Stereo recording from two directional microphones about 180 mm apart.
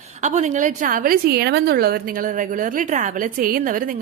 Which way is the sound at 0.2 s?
40° right (ahead or behind).